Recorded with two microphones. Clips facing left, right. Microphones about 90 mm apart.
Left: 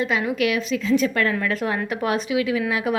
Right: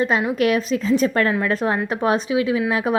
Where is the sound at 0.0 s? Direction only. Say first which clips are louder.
Right 3 dB; 35° right (ahead or behind).